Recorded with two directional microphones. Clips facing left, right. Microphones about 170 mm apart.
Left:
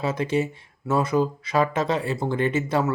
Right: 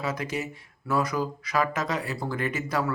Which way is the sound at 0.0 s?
25° left (ahead or behind).